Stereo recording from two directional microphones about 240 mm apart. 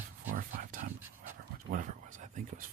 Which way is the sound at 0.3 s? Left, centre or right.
Right.